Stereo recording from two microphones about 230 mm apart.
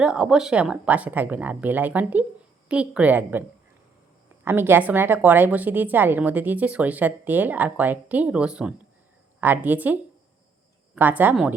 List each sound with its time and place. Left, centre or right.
0.0 s a woman's voice: centre
4.4 s a woman's voice: centre